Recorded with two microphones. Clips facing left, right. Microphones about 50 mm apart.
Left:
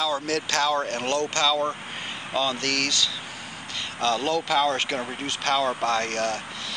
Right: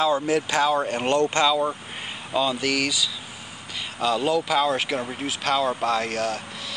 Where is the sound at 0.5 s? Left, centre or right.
Centre.